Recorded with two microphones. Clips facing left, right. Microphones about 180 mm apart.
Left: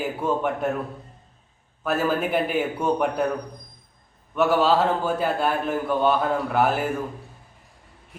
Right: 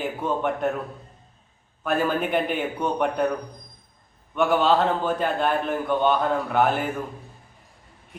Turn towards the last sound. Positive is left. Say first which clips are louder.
# even
turn(degrees=5)  # may be behind; listen again after turning